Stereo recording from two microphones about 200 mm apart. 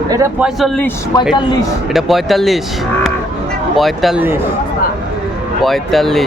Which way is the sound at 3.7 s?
Centre (ahead or behind).